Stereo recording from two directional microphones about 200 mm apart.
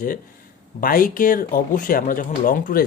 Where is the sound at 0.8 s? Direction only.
45° left (ahead or behind).